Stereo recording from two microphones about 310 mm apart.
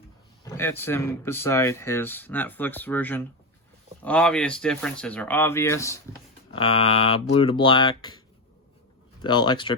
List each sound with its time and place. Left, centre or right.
0.4 s speech: centre
9.2 s speech: centre